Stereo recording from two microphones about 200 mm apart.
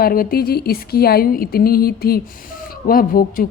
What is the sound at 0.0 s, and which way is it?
Speech, 45° left (ahead or behind).